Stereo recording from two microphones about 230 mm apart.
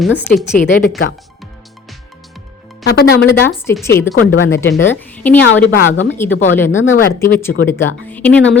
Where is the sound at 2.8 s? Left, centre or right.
Left.